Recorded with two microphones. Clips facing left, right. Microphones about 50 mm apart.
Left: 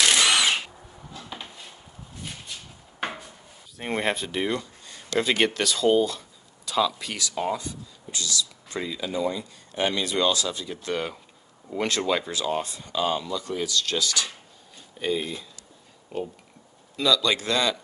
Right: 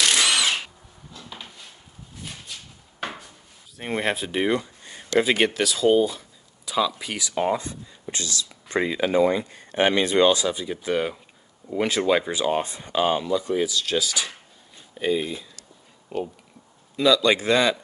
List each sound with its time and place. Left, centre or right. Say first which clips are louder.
0.3 s drill: left 1 dB; centre
1.1 s dishes: left 1 dB; centre
3.7 s speech: right 1 dB; centre
4.4 s a sound: right 4 dB; right
5.2 s speech: even; centre
16.9 s speech: right 4 dB; centre